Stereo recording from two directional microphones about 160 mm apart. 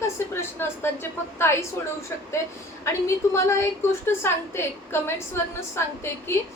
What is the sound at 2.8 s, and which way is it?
A woman's voice, 15° left (ahead or behind).